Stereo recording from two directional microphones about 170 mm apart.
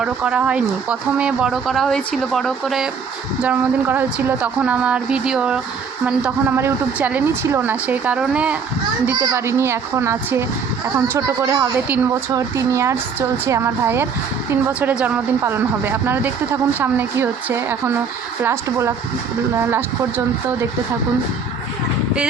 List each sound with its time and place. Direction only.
0.0 s a woman's voice: 5° right (ahead or behind)
9.2 s a woman's voice: 20° right (ahead or behind)